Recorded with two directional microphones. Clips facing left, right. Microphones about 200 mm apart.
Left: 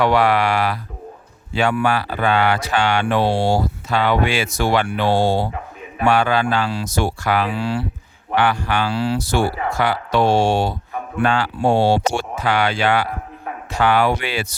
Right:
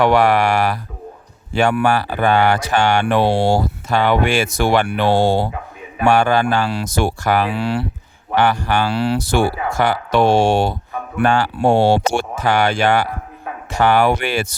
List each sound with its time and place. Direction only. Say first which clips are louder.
0.0 s speech: right 2 dB; 50° right (ahead or behind)
6.1 s speech: right 3 dB; 45° right (ahead or behind)
6.7 s speech: right 2 dB; 60° right (ahead or behind)
7.5 s speech: right 2 dB; 65° right (ahead or behind)
8.4 s speech: right 2 dB; 45° right (ahead or behind)
8.9 s speech: right 2 dB; 65° right (ahead or behind)
9.7 s speech: right 3 dB; 45° right (ahead or behind)
11.2 s speech: right 3 dB; 45° right (ahead or behind)
11.5 s speech: right 1 dB; 60° right (ahead or behind)